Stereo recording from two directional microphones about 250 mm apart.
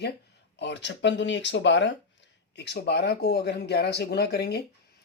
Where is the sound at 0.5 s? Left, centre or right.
Left.